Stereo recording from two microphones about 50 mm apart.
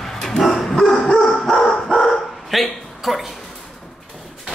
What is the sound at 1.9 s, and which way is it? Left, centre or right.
Dog, centre.